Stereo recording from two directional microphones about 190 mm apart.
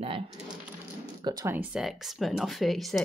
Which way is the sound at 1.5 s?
5° right (ahead or behind).